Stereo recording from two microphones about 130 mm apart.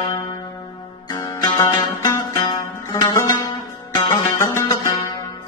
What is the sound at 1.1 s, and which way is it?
Music, 30° left (ahead or behind).